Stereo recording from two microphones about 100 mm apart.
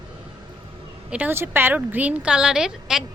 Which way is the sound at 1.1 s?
20° right (ahead or behind).